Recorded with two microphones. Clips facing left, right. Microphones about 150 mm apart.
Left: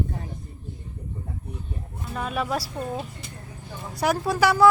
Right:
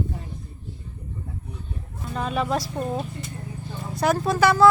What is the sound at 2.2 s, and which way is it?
Speech, 5° left (ahead or behind).